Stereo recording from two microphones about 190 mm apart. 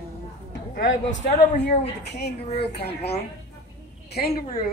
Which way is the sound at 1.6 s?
60° left (ahead or behind).